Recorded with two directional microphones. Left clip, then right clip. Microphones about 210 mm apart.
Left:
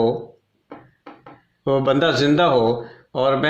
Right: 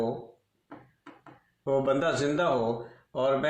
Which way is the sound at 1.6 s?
35° left (ahead or behind).